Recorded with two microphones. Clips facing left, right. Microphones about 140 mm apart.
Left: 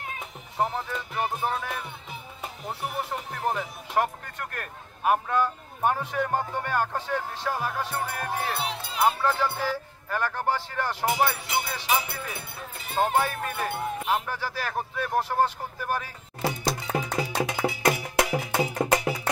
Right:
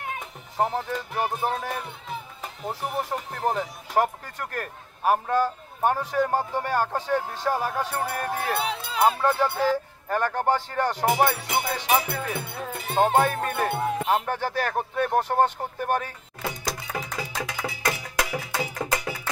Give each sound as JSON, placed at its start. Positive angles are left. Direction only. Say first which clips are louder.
{"t": 0.6, "sound": "speech", "louder": "right 2 dB", "side_deg": -35}
{"t": 2.7, "sound": "speech", "louder": "right 3 dB", "side_deg": -40}
{"t": 16.3, "sound": "music", "louder": "left 4 dB", "side_deg": 30}